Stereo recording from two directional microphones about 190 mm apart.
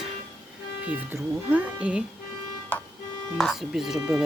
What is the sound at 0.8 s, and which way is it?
Speech, 5° right (ahead or behind).